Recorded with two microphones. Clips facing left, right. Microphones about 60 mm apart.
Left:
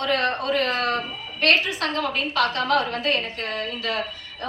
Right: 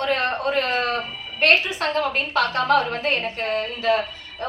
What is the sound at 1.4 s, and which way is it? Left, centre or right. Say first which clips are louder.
A woman's voice: right 2 dB; right.